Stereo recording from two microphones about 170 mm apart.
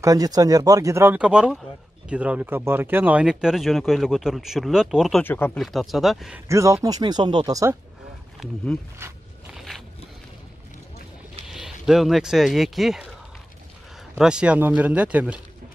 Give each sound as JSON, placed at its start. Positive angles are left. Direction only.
{"t": 0.0, "sound": "speech", "side_deg": -20}
{"t": 5.2, "sound": "speech", "side_deg": 10}
{"t": 5.6, "sound": "speech", "side_deg": 0}
{"t": 6.4, "sound": "speech", "side_deg": -15}
{"t": 9.0, "sound": "speech", "side_deg": -15}
{"t": 9.5, "sound": "a sound", "side_deg": 0}
{"t": 11.4, "sound": "speech", "side_deg": 0}
{"t": 14.1, "sound": "speech", "side_deg": -5}